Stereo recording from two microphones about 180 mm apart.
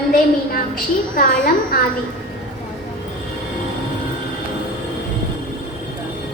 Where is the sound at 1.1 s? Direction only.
50° left (ahead or behind).